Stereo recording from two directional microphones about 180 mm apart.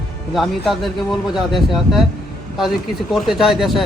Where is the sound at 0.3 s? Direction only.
Centre (ahead or behind).